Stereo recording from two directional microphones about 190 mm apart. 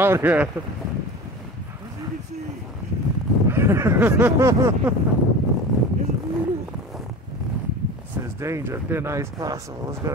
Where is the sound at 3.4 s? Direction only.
15° right (ahead or behind).